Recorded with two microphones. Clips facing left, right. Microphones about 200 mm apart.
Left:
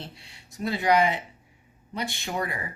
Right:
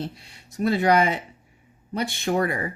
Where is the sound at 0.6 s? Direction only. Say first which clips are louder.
Right 3 dB; 50° right (ahead or behind).